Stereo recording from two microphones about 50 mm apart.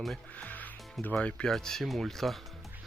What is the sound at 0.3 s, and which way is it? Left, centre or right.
Music, left.